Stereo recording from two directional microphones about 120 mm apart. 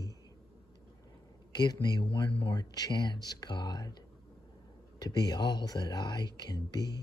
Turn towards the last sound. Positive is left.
turn(degrees=35)  # may be behind; listen again after turning